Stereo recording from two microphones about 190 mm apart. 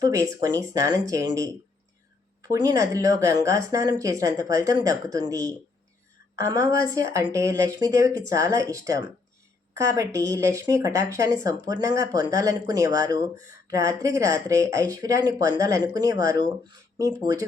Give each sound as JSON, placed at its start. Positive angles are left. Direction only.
{"t": 0.0, "sound": "speech", "side_deg": -20}
{"t": 2.5, "sound": "speech", "side_deg": -15}